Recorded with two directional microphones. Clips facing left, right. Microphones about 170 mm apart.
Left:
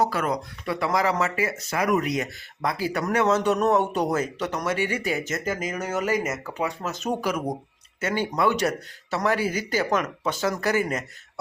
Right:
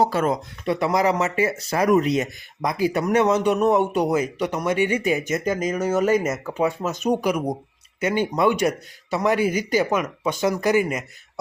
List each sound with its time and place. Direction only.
0.0 s speech: 25° right (ahead or behind)